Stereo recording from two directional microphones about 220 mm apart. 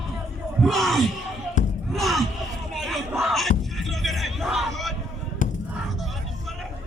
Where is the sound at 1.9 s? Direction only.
Centre (ahead or behind).